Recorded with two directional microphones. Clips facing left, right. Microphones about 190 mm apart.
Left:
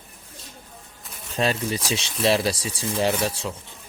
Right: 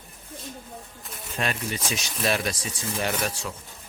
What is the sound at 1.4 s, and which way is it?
Speech, 35° left (ahead or behind).